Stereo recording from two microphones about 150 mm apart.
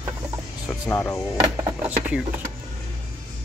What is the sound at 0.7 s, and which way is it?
Speech, 15° left (ahead or behind).